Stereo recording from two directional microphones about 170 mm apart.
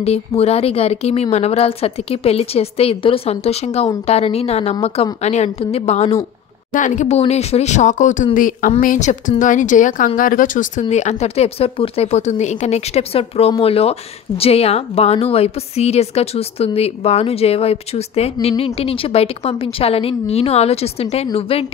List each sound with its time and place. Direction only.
0.0 s speech: 35° left (ahead or behind)